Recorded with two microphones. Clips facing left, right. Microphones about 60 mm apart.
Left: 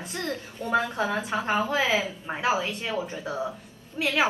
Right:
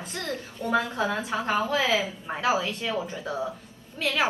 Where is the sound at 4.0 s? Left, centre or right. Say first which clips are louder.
Left 1 dB; centre.